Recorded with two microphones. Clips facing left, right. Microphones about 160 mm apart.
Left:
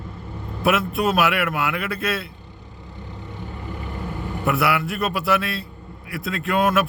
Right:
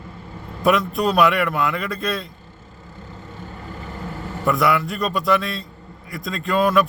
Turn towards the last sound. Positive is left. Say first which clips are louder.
# right 1 dB
turn(degrees=5)  # may be behind; listen again after turning